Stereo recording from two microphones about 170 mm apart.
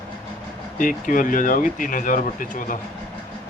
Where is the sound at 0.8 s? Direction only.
50° left (ahead or behind).